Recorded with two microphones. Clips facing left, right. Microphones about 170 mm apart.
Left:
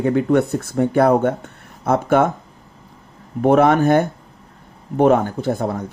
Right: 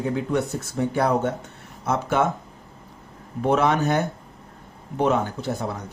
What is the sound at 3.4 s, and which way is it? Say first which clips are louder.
Speech: left 7 dB; 50° left (ahead or behind).